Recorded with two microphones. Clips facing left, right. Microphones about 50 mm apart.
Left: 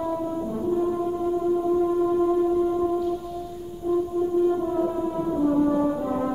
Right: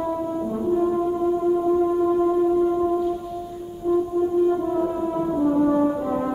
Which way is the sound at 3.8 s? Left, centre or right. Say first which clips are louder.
Right 3 dB; right.